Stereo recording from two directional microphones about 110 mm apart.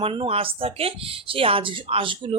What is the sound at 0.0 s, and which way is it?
Speech, 55° right (ahead or behind).